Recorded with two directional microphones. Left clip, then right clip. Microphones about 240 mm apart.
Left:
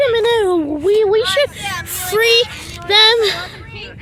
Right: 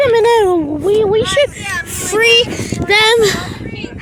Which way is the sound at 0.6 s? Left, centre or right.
Centre.